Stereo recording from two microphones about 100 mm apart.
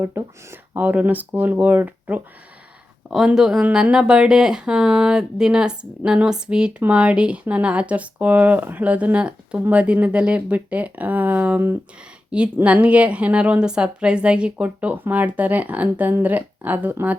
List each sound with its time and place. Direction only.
0.0 s speech: 20° right (ahead or behind)
3.1 s speech: 5° right (ahead or behind)